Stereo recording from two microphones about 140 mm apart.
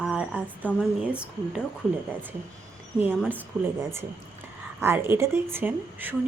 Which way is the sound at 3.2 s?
15° right (ahead or behind).